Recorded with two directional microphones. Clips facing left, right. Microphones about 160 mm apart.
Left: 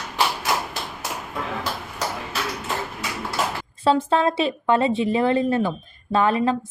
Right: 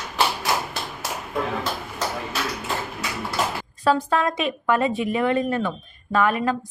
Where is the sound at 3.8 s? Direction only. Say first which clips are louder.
Left 2 dB; 25° left (ahead or behind).